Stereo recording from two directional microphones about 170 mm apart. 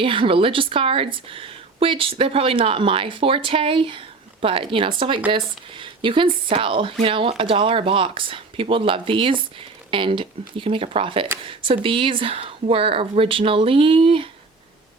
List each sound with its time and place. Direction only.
0.0 s speech: 30° right (ahead or behind)